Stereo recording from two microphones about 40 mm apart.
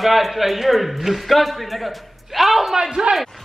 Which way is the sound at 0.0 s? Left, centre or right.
Centre.